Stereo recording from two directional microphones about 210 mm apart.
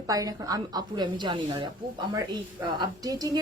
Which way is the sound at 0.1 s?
15° right (ahead or behind).